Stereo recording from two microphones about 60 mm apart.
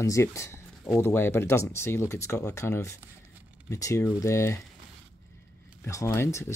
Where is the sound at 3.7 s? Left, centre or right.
Left.